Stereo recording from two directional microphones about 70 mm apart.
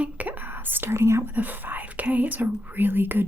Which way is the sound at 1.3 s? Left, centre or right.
Right.